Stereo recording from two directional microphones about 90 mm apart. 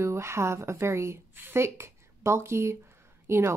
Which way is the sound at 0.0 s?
30° right (ahead or behind).